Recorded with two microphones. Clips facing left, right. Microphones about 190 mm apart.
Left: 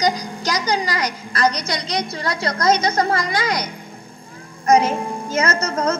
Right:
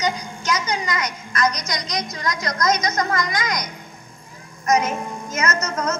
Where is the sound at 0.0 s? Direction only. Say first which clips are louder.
Left 4 dB; 35° left (ahead or behind).